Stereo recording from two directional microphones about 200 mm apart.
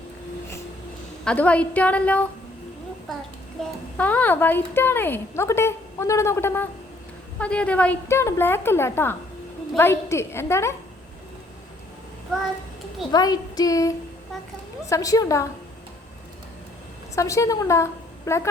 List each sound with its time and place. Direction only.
1.2 s speech: 5° left (ahead or behind)
3.6 s speech: 5° left (ahead or behind)
13.1 s child singing: 20° left (ahead or behind)
14.8 s speech: 15° left (ahead or behind)
17.2 s a woman's voice: 15° left (ahead or behind)